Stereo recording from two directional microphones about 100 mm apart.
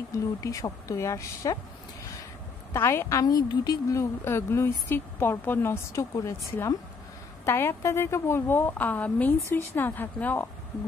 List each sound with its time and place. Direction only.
0.4 s a woman's voice: 35° left (ahead or behind)
2.7 s a woman's voice: 25° left (ahead or behind); by 4.0 s 40° left (ahead or behind)
4.0 s a woman's voice: 25° left (ahead or behind)
6.1 s a woman's voice: 35° left (ahead or behind); by 10.5 s 15° left (ahead or behind)